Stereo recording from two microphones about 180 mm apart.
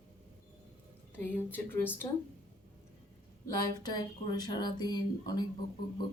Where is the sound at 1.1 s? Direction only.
10° left (ahead or behind).